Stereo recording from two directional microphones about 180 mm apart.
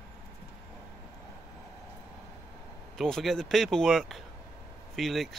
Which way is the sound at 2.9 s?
Centre (ahead or behind).